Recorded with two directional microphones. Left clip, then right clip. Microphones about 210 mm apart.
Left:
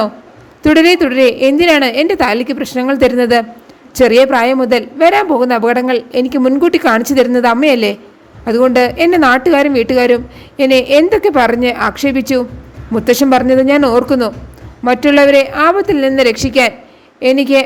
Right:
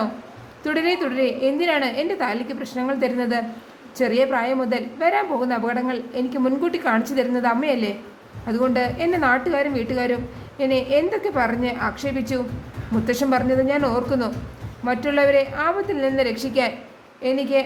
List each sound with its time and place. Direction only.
0.6 s a man's voice: 40° left (ahead or behind)